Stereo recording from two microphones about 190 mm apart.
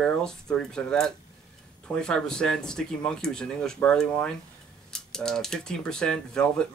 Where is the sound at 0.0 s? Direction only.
5° left (ahead or behind).